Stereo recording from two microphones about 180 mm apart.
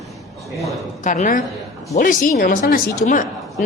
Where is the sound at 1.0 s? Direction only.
45° left (ahead or behind).